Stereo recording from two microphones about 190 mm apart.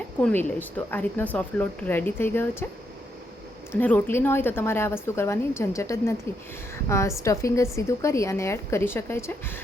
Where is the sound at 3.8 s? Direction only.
10° left (ahead or behind).